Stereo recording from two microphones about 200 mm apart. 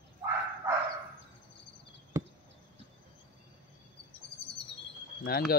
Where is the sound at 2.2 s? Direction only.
15° right (ahead or behind).